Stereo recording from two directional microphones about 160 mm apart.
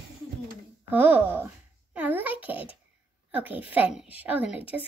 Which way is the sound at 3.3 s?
10° right (ahead or behind).